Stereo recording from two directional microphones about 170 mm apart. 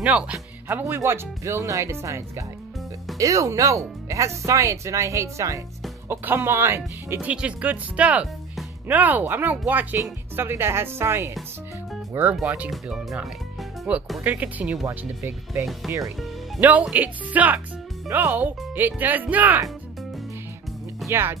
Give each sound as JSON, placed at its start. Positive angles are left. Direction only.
{"t": 0.0, "sound": "speech", "side_deg": -5}
{"t": 16.0, "sound": "speech", "side_deg": 0}
{"t": 21.1, "sound": "speech", "side_deg": -15}